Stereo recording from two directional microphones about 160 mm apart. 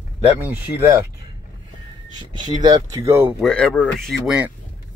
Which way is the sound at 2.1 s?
30° right (ahead or behind).